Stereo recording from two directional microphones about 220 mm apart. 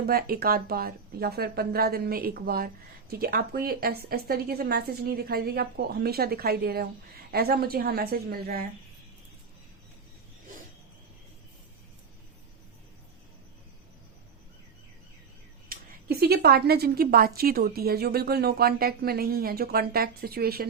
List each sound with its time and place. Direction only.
0.0 s a woman's voice: 45° right (ahead or behind)
15.7 s a woman's voice: 45° right (ahead or behind)